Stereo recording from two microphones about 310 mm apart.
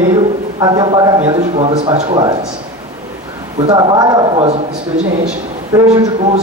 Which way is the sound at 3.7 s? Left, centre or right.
Centre.